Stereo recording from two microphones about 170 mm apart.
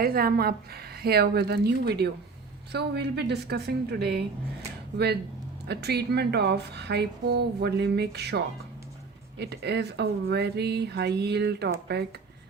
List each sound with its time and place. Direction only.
0.0 s speech: 60° right (ahead or behind)
5.6 s speech: 75° right (ahead or behind)